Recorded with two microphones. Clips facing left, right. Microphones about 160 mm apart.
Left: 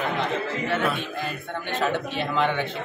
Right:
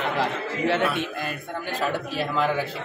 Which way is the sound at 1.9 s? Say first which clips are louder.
Even; 5° right (ahead or behind).